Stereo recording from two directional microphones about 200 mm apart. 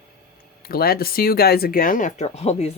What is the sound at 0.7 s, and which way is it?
Speech, 50° left (ahead or behind).